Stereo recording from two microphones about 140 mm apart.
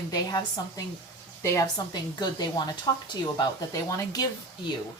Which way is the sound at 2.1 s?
30° left (ahead or behind).